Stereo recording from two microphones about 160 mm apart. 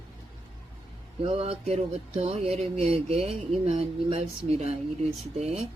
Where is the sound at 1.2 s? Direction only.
40° right (ahead or behind).